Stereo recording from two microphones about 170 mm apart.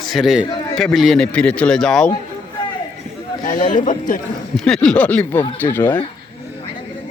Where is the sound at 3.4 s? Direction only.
50° left (ahead or behind).